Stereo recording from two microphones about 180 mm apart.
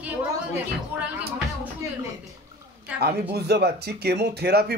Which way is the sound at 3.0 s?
65° right (ahead or behind).